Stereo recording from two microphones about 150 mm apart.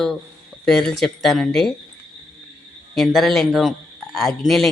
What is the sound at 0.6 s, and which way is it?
A man's voice, 5° left (ahead or behind).